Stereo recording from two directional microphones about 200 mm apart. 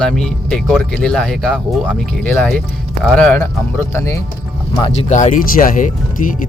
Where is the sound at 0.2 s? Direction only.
5° left (ahead or behind).